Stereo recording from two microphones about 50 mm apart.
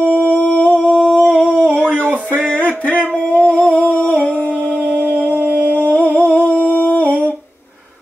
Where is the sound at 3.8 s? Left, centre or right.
Left.